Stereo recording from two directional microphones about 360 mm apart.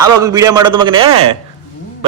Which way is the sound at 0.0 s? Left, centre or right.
Centre.